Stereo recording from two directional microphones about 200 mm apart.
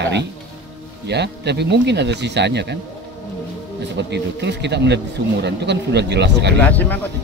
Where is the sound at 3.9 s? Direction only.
60° right (ahead or behind).